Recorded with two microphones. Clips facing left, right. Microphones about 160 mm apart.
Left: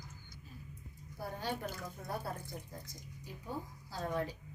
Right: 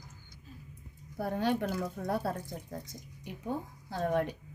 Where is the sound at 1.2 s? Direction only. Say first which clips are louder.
Right 9 dB; 70° right (ahead or behind).